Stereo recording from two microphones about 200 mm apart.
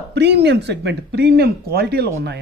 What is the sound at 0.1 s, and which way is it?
Speech, 55° right (ahead or behind).